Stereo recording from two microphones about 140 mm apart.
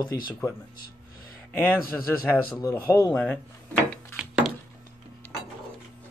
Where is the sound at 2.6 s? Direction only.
20° left (ahead or behind).